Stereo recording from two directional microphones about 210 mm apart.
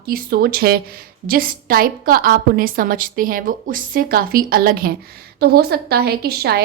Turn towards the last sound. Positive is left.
turn(degrees=-50)  # may be behind; listen again after turning